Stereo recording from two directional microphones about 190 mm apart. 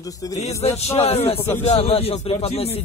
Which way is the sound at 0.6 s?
35° left (ahead or behind).